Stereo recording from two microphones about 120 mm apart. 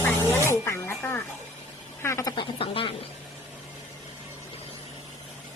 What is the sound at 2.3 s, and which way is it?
Speech, 50° left (ahead or behind).